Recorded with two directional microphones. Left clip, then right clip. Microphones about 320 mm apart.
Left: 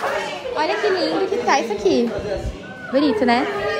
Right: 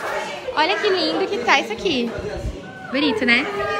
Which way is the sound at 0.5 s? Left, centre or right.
Centre.